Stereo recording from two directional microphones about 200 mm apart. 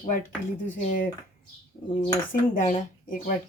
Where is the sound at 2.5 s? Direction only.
40° left (ahead or behind).